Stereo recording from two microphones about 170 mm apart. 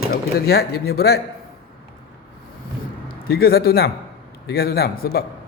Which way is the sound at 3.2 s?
65° left (ahead or behind).